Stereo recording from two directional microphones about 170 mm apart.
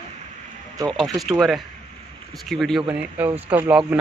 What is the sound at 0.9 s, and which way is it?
Speech, centre (ahead or behind).